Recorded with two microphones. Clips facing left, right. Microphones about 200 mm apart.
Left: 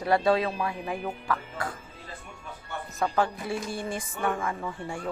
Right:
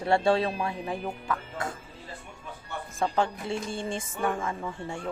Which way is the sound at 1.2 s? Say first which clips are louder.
Left 1 dB; 20° right (ahead or behind).